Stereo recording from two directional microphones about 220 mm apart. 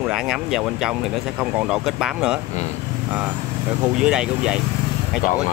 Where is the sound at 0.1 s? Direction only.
5° right (ahead or behind).